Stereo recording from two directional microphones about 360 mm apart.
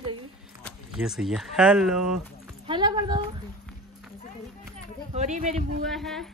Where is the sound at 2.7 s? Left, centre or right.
Centre.